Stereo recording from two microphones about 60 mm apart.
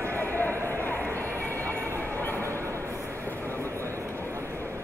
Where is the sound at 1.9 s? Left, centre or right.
Left.